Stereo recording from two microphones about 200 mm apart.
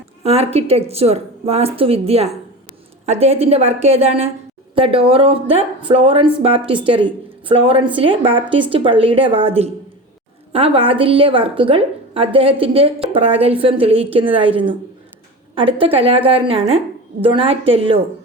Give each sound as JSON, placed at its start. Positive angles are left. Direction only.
{"t": 0.2, "sound": "a woman's voice", "side_deg": -30}